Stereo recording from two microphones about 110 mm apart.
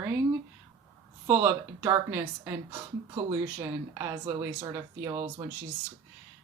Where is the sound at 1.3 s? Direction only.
20° right (ahead or behind).